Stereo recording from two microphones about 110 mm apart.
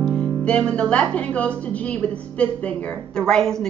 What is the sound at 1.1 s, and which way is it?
A woman's voice, 10° left (ahead or behind).